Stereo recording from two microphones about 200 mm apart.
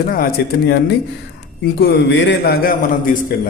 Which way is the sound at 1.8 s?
60° left (ahead or behind).